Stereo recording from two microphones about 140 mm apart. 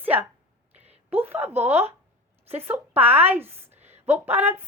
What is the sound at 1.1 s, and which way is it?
A woman's voice, 15° right (ahead or behind).